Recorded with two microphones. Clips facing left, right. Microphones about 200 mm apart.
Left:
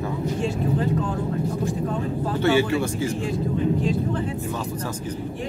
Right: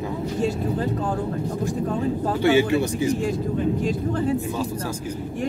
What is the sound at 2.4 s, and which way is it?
Speech, 15° right (ahead or behind).